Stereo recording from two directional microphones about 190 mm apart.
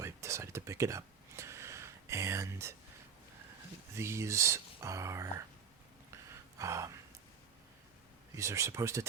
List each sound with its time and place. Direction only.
0.0 s a sound: 15° right (ahead or behind)
3.9 s speech: 15° right (ahead or behind)
6.6 s speech: 15° right (ahead or behind)
8.4 s speech: 15° right (ahead or behind)